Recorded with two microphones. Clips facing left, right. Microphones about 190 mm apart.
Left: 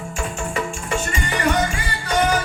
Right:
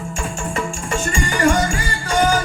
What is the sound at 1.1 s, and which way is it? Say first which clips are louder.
Music: right 5 dB; 45° right (ahead or behind).